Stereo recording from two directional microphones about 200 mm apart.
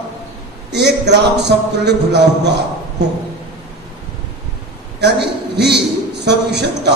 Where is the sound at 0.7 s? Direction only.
55° right (ahead or behind).